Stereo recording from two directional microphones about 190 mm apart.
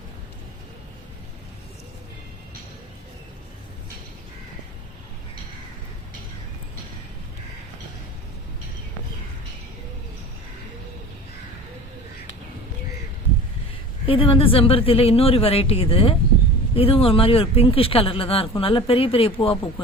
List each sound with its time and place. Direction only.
14.1 s speech: 30° left (ahead or behind)